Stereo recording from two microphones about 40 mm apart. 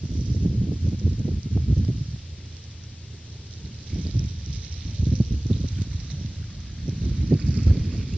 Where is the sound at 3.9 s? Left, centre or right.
Left.